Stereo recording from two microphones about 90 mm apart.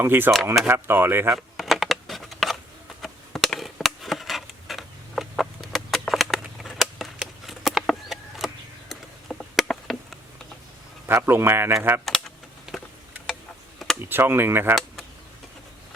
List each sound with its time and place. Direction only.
0.0 s speech: 25° right (ahead or behind)
1.5 s computer keyboard: centre (ahead or behind)
3.0 s a sound: centre (ahead or behind)
9.6 s a sound: 5° left (ahead or behind)
11.2 s speech: 25° right (ahead or behind)
12.0 s typing: 5° left (ahead or behind)
12.7 s tick-tock: 5° right (ahead or behind)
13.7 s a sound: 5° left (ahead or behind)
14.1 s speech: 25° right (ahead or behind)